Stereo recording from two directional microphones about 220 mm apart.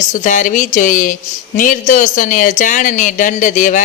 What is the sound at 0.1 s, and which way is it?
Speech, 35° left (ahead or behind).